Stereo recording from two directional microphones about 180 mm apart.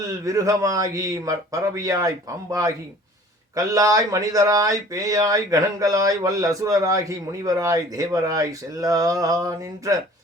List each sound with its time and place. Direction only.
0.3 s speech: 20° right (ahead or behind)